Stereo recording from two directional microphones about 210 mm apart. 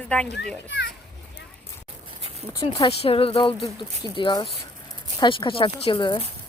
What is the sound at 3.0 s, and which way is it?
Speech, 25° left (ahead or behind).